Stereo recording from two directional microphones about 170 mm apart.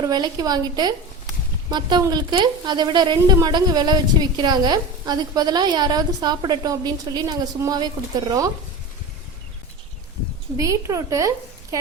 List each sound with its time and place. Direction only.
0.0 s a woman's voice: 25° right (ahead or behind)
10.6 s a woman's voice: 20° right (ahead or behind)